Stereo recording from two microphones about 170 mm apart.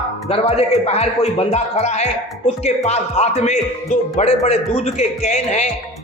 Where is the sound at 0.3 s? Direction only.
35° left (ahead or behind).